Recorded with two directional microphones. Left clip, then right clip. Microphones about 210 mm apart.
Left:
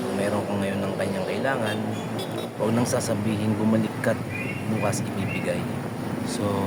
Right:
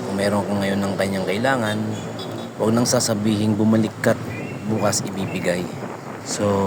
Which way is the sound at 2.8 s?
20° right (ahead or behind).